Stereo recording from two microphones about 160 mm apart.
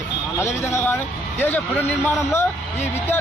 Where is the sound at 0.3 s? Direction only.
15° left (ahead or behind).